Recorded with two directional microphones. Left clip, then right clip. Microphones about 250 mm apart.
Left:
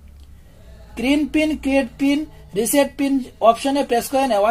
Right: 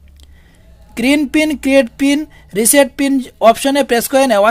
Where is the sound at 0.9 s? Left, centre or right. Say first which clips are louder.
Right 6 dB; right.